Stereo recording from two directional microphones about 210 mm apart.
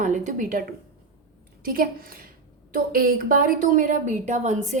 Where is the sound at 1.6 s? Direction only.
45° right (ahead or behind).